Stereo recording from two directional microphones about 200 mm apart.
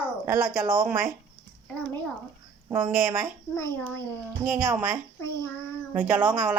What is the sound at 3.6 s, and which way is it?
Speech, 10° left (ahead or behind).